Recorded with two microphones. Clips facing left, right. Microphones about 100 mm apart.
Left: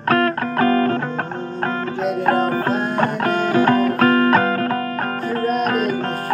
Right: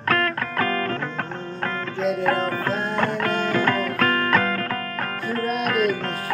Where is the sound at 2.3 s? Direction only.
15° left (ahead or behind).